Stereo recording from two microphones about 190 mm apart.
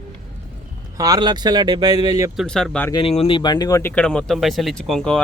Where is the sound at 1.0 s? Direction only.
20° right (ahead or behind).